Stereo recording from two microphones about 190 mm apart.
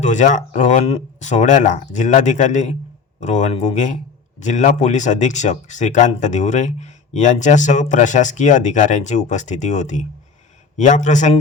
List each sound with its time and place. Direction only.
0.0 s speech: 40° left (ahead or behind)